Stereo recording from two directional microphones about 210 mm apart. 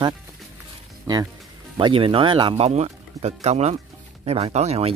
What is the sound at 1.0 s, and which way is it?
Speech, 20° right (ahead or behind).